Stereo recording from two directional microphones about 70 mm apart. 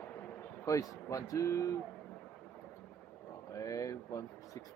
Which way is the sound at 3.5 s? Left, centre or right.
Left.